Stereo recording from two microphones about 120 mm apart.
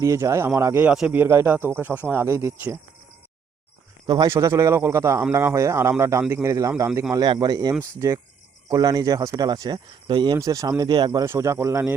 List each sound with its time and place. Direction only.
0.0 s a man's voice: 25° right (ahead or behind)
4.2 s a man's voice: 30° right (ahead or behind)
10.3 s speech: 25° right (ahead or behind)
11.3 s a man's voice: 25° right (ahead or behind)